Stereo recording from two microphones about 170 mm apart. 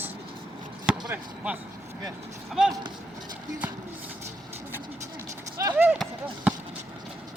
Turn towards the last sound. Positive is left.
turn(degrees=-5)  # may be behind; listen again after turning